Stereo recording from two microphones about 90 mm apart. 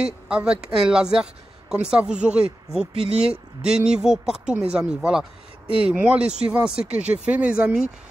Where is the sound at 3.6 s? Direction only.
10° right (ahead or behind).